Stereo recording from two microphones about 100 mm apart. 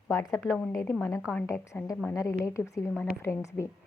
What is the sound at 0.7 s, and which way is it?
A woman's voice, 30° left (ahead or behind).